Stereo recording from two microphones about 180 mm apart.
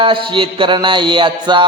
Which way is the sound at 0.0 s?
30° right (ahead or behind).